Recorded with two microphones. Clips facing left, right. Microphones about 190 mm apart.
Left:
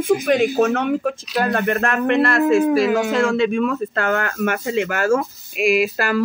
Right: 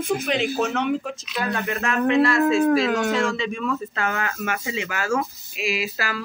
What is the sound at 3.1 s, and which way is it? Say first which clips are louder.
Speech: left 6 dB; 60° left (ahead or behind).